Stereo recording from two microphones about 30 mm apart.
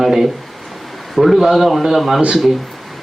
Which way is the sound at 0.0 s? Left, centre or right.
Centre.